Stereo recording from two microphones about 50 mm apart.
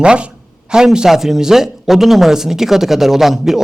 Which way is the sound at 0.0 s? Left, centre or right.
Centre.